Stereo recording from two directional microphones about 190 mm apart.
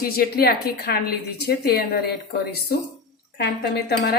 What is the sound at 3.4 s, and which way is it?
Speech, 60° left (ahead or behind).